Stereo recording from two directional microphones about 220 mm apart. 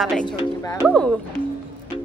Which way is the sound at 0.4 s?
15° left (ahead or behind).